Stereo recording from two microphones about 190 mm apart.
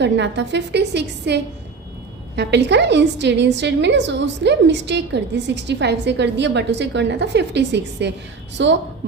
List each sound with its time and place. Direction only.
0.0 s a woman's voice: 65° right (ahead or behind)